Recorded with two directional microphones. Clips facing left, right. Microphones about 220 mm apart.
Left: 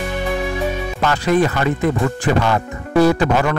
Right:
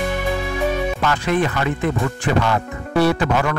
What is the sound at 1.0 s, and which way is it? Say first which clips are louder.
A man's voice: left 5 dB; 40° left (ahead or behind).